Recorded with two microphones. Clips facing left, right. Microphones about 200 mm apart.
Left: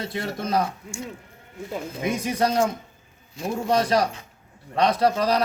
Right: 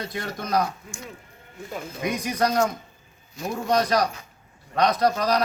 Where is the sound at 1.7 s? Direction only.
25° left (ahead or behind).